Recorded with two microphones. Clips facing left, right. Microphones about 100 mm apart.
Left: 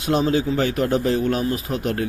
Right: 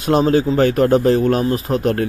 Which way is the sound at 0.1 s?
45° right (ahead or behind).